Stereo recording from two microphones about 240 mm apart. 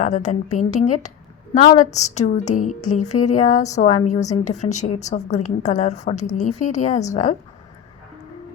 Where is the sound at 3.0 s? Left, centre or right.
Left.